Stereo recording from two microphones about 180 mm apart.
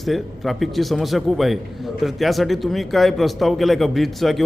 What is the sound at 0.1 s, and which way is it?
Speech, centre (ahead or behind).